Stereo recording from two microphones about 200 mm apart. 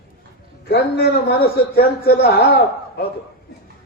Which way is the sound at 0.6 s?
55° left (ahead or behind).